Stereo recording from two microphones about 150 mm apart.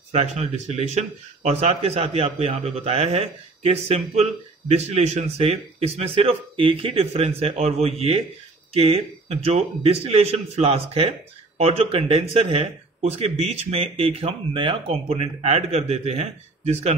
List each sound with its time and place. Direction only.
0.1 s speech: 45° right (ahead or behind)